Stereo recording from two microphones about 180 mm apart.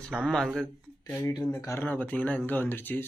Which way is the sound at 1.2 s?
15° left (ahead or behind).